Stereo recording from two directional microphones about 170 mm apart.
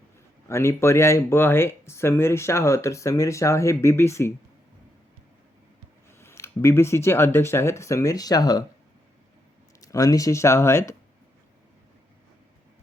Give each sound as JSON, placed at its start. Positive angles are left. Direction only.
{"t": 0.4, "sound": "speech", "side_deg": 15}
{"t": 6.1, "sound": "speech", "side_deg": 15}
{"t": 9.8, "sound": "speech", "side_deg": 20}